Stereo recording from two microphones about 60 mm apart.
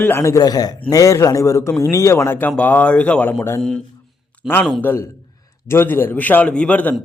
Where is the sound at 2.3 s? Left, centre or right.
Left.